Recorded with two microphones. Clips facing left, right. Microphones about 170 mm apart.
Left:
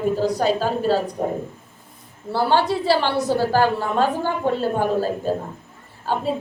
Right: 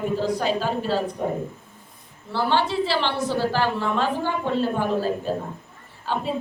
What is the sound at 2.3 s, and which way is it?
A woman's voice, 40° left (ahead or behind).